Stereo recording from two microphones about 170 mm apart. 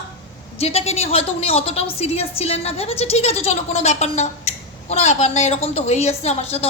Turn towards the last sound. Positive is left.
turn(degrees=40)  # may be behind; listen again after turning